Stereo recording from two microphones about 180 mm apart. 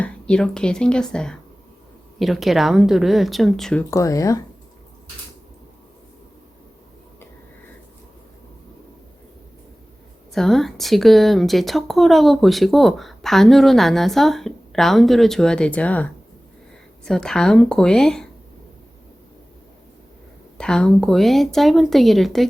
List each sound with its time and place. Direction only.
0.0 s a woman's voice: 5° left (ahead or behind)
3.8 s speech: 15° left (ahead or behind)
10.3 s a woman's voice: centre (ahead or behind)
17.1 s a woman's voice: 5° left (ahead or behind)
20.6 s a woman's voice: 5° left (ahead or behind)